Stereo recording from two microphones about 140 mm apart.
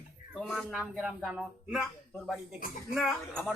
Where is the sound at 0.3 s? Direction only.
Centre (ahead or behind).